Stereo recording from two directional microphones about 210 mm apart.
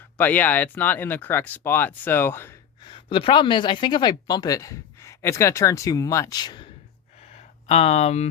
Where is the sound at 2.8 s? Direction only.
20° left (ahead or behind).